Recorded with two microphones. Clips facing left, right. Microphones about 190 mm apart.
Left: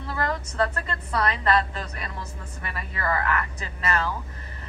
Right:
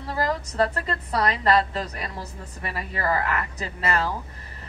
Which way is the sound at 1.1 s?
35° right (ahead or behind).